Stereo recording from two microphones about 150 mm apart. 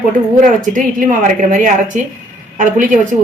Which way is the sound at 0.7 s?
60° right (ahead or behind).